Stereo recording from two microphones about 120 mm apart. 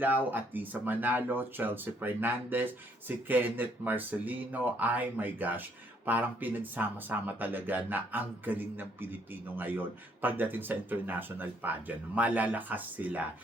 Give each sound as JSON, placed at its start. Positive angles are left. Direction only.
{"t": 0.0, "sound": "speech", "side_deg": -15}